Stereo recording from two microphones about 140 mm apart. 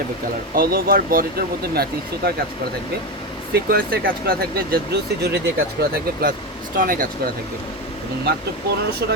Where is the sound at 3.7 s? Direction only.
90° right.